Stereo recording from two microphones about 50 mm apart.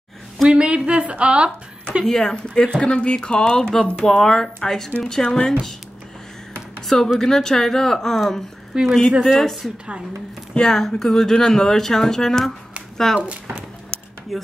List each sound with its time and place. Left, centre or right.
0.5 s speech: right
2.0 s speech: centre
2.8 s speech: left
7.2 s a woman's voice: centre
13.2 s speech: right
14.3 s a woman's voice: centre